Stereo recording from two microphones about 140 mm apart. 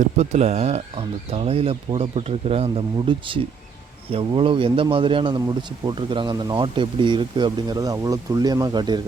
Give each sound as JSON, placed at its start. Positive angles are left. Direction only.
{"t": 0.2, "sound": "speech", "side_deg": -50}